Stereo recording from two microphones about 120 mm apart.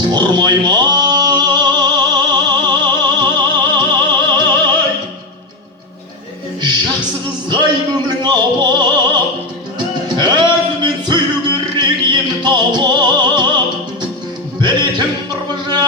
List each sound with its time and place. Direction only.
0.1 s a sound: 40° right (ahead or behind)
3.8 s opera: 40° right (ahead or behind)
7.5 s opera: 40° right (ahead or behind)
9.7 s music: 35° right (ahead or behind)
14.6 s music: 35° right (ahead or behind)